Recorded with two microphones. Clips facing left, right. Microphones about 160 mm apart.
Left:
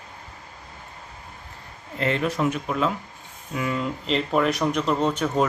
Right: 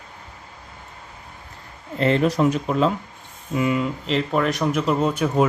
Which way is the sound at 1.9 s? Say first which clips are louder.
Right 5 dB; 35° right (ahead or behind).